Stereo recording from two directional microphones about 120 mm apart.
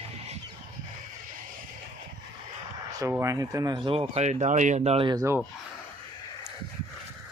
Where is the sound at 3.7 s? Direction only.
45° right (ahead or behind); by 5.0 s 65° right (ahead or behind).